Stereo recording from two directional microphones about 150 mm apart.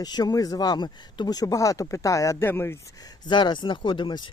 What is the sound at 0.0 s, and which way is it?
Speech, 25° left (ahead or behind).